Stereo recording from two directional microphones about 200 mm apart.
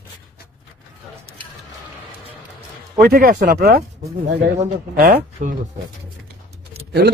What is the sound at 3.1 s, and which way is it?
Speech, 45° right (ahead or behind).